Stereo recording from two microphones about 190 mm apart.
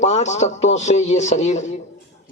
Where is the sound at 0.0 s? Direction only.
35° left (ahead or behind).